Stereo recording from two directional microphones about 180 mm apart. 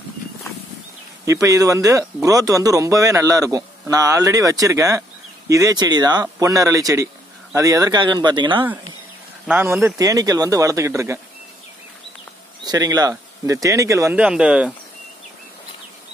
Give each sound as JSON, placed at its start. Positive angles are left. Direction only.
{"t": 1.2, "sound": "a man's voice", "side_deg": -15}
{"t": 9.5, "sound": "speech", "side_deg": -10}
{"t": 12.6, "sound": "a man's voice", "side_deg": -20}